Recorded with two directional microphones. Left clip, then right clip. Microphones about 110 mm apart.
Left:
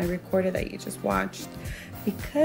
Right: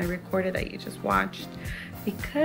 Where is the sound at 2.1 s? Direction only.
30° left (ahead or behind).